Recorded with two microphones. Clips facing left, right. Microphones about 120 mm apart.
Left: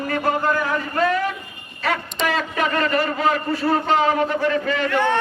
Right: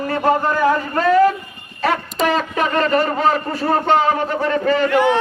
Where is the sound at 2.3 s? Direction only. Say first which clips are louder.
Right 3 dB; 35° right (ahead or behind).